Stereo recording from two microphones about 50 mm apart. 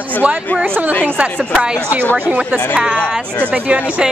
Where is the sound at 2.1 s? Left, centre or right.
Right.